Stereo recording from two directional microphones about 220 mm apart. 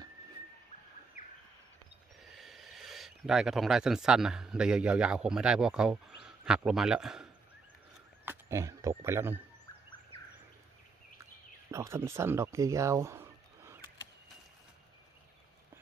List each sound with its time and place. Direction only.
2.3 s a man's voice: centre (ahead or behind)
8.3 s speech: 15° right (ahead or behind)
11.7 s speech: 10° right (ahead or behind)